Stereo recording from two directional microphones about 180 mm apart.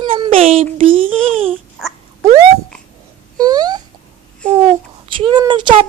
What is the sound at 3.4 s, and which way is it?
Speech, 20° right (ahead or behind).